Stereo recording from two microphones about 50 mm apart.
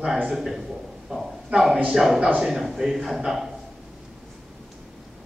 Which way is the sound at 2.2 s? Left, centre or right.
Right.